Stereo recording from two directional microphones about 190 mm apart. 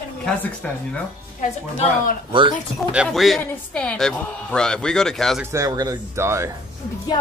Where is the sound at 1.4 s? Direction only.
45° left (ahead or behind).